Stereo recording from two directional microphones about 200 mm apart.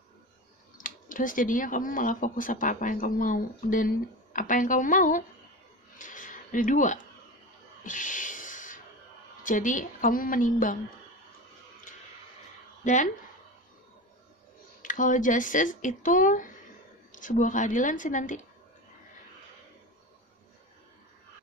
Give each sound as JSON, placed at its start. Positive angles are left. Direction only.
{"t": 0.7, "sound": "speech", "side_deg": 40}
{"t": 5.9, "sound": "a sound", "side_deg": 40}
{"t": 9.4, "sound": "speech", "side_deg": 40}
{"t": 12.8, "sound": "speech", "side_deg": 35}
{"t": 14.8, "sound": "speech", "side_deg": 40}